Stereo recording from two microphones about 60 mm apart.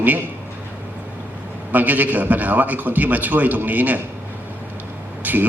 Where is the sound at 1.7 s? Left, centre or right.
Right.